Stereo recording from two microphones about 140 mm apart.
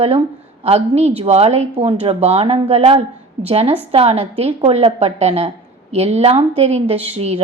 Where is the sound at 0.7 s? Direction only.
50° right (ahead or behind).